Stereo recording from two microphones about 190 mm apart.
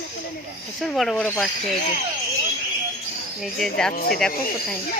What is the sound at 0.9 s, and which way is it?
Speech, centre (ahead or behind).